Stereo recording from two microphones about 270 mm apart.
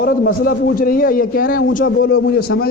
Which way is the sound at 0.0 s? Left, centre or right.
Left.